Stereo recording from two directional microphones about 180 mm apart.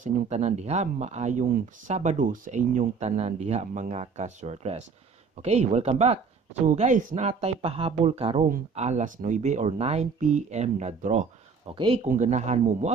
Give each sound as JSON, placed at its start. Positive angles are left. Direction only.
{"t": 0.0, "sound": "speech", "side_deg": -40}
{"t": 11.7, "sound": "speech", "side_deg": -30}
{"t": 12.0, "sound": "speech", "side_deg": -40}